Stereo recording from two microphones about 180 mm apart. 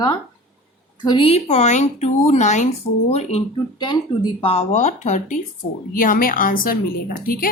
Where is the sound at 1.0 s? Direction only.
30° left (ahead or behind).